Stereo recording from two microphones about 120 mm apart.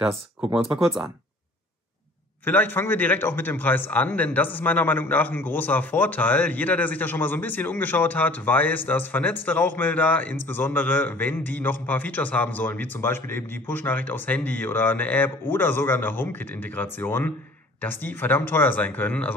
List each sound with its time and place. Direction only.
0.0 s speech: 5° right (ahead or behind)
2.4 s a man's voice: 15° left (ahead or behind)